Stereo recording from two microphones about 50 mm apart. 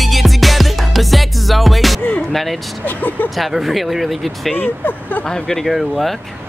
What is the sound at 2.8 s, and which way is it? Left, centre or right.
Vehicle, left.